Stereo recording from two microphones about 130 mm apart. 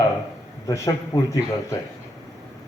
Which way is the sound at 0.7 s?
25° left (ahead or behind).